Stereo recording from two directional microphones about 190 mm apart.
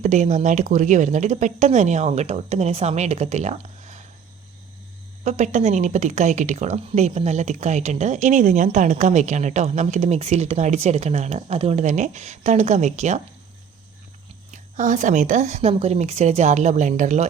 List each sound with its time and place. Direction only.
0.0 s a woman's voice: 40° right (ahead or behind)
5.2 s a woman's voice: 35° right (ahead or behind)
14.5 s a woman's voice: 40° right (ahead or behind)